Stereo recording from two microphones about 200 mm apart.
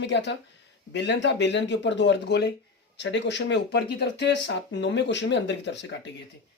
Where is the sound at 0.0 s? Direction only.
60° left (ahead or behind).